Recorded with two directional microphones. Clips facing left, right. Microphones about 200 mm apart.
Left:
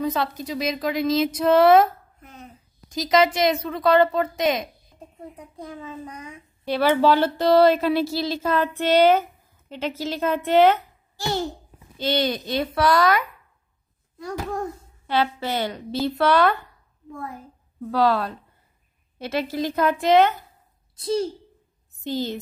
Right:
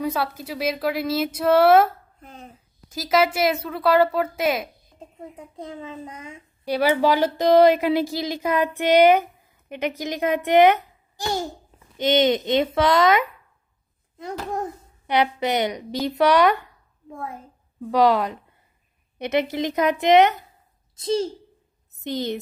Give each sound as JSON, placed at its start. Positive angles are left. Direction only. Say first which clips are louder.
{"t": 0.0, "sound": "speech", "louder": "left 1 dB", "side_deg": -5}
{"t": 2.9, "sound": "speech", "louder": "left 1 dB", "side_deg": -5}
{"t": 5.6, "sound": "a child's voice", "louder": "right 1 dB", "side_deg": -20}
{"t": 6.6, "sound": "a child's voice", "louder": "left 1 dB", "side_deg": -10}
{"t": 14.5, "sound": "a child's voice", "louder": "even", "side_deg": -20}
{"t": 22.0, "sound": "a child's voice", "louder": "even", "side_deg": -20}